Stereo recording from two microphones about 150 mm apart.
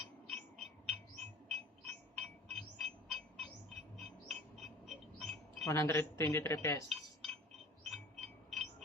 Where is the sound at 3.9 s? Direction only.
Centre (ahead or behind).